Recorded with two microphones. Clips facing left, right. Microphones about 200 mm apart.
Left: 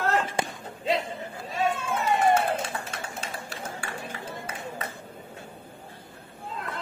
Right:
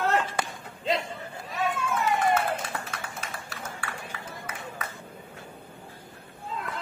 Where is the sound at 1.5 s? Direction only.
25° left (ahead or behind).